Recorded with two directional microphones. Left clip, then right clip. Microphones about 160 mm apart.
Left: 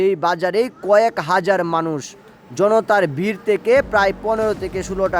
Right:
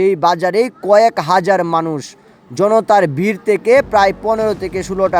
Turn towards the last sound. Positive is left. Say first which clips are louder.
# right 4 dB
turn(degrees=-20)  # may be behind; listen again after turning